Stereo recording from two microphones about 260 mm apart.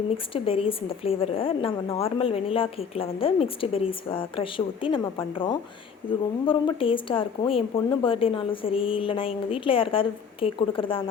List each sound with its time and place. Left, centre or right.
0.3 s a woman's voice: left